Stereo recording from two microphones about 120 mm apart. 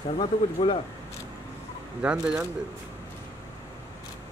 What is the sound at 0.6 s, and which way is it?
Speech, 40° left (ahead or behind).